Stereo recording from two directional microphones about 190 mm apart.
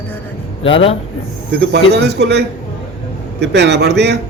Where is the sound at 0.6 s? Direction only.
30° left (ahead or behind).